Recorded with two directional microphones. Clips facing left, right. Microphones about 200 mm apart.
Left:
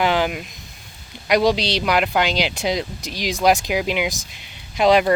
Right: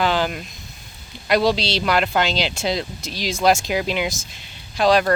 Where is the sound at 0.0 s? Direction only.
15° left (ahead or behind).